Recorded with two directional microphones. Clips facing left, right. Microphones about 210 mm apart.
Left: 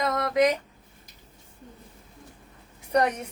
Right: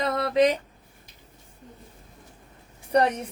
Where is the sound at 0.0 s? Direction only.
30° right (ahead or behind).